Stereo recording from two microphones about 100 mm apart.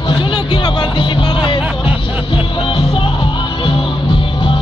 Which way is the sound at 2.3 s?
60° left (ahead or behind).